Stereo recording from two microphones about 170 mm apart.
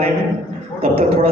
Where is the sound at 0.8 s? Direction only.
35° right (ahead or behind).